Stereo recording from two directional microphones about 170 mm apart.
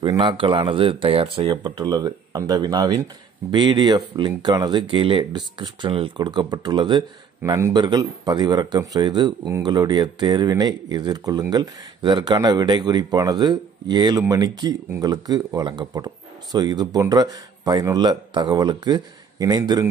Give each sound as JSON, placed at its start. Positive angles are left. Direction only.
{"t": 0.0, "sound": "speech", "side_deg": -30}